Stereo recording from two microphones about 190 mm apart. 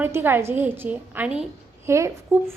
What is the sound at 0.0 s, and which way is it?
A woman's voice, 10° right (ahead or behind).